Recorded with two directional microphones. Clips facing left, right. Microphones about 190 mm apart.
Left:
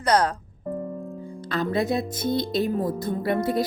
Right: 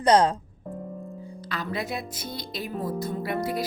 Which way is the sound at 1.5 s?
50° left (ahead or behind).